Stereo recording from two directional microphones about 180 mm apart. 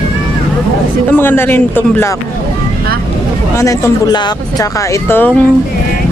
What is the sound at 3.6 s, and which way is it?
Speech, 15° left (ahead or behind).